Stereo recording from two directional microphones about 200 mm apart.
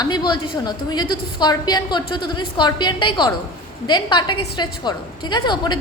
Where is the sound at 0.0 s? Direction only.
20° left (ahead or behind).